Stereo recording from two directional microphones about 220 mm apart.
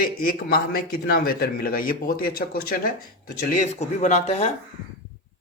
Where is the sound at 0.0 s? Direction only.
40° left (ahead or behind).